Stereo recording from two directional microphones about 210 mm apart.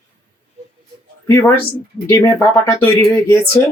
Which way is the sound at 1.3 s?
10° left (ahead or behind).